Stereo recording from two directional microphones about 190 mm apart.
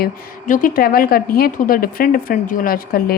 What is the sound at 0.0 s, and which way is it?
A woman's voice, 45° left (ahead or behind).